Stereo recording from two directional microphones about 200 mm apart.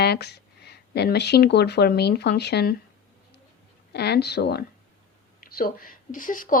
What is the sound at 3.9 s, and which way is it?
Speech, 55° left (ahead or behind).